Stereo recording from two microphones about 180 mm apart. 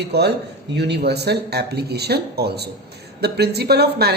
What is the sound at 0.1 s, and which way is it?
Speech, 65° right (ahead or behind).